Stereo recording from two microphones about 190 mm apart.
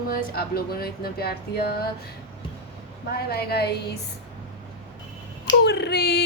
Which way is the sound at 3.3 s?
55° left (ahead or behind).